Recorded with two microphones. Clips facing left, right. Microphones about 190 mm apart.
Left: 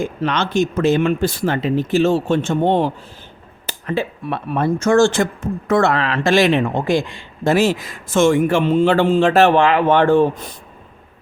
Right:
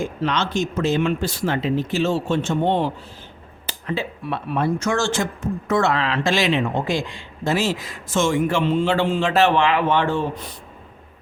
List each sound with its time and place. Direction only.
0.2 s speech: 55° left (ahead or behind)